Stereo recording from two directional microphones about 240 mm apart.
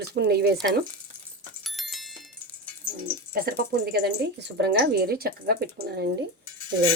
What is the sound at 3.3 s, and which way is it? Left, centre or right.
Speech, right.